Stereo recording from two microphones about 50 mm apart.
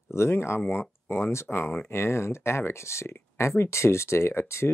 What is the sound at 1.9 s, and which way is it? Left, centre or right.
Speech, left.